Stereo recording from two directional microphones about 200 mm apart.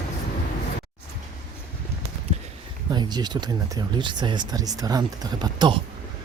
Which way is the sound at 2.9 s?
20° right (ahead or behind).